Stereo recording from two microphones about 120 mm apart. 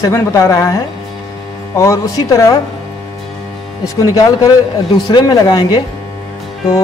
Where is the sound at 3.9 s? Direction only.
30° left (ahead or behind).